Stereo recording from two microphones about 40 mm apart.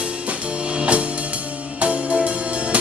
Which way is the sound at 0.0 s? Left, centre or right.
Right.